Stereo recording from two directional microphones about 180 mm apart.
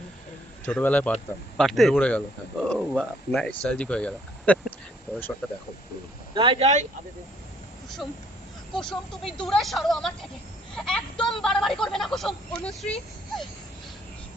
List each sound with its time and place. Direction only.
0.6 s speech: 10° left (ahead or behind)
6.3 s speech: 30° right (ahead or behind)
8.7 s speech: 5° left (ahead or behind)